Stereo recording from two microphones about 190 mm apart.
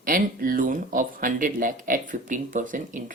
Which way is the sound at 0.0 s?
45° right (ahead or behind).